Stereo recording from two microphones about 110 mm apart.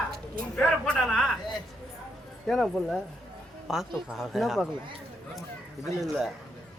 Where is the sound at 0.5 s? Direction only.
5° left (ahead or behind).